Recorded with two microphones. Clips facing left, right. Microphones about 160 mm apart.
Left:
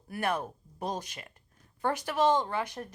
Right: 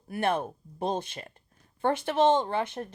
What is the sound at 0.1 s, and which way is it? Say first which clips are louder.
Speech: right 4 dB; 25° right (ahead or behind).